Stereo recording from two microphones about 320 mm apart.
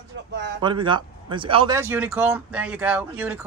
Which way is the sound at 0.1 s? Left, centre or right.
Right.